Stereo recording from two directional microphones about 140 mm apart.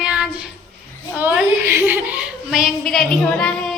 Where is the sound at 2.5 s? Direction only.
Centre (ahead or behind).